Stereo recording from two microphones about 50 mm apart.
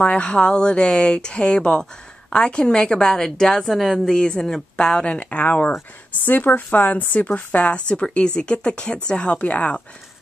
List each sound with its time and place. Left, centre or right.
0.0 s a woman's voice: left; by 4.0 s centre
4.0 s a woman's voice: centre